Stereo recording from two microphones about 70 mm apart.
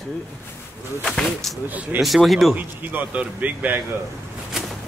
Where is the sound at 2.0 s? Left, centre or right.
Centre.